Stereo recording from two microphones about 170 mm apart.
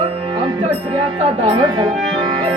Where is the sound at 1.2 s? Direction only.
30° right (ahead or behind).